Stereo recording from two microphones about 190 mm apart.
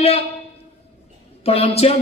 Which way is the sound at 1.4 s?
30° left (ahead or behind).